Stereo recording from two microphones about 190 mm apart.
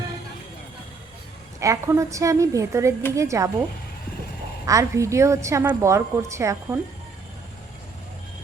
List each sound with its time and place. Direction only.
1.5 s a woman's voice: 15° right (ahead or behind)
4.6 s a woman's voice: 15° right (ahead or behind)